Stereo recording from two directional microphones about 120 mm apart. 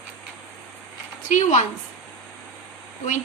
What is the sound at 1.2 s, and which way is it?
Speech, 80° left.